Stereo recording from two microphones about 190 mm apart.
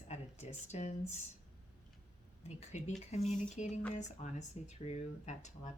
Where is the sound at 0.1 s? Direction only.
35° left (ahead or behind).